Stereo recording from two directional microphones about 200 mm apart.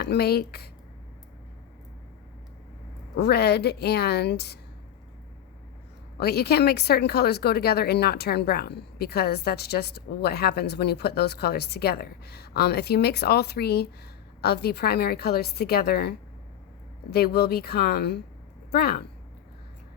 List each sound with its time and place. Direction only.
0.0 s speech: 55° left (ahead or behind)
3.2 s a woman's voice: 55° left (ahead or behind)
6.1 s a woman's voice: 55° left (ahead or behind)